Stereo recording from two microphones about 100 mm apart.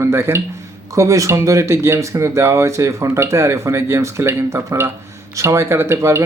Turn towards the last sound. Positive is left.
turn(degrees=-25)  # may be behind; listen again after turning